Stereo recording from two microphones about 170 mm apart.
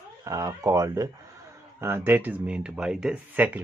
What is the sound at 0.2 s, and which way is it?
Speech, 20° right (ahead or behind).